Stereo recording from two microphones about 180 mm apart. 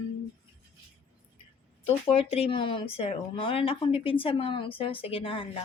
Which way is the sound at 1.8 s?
30° left (ahead or behind).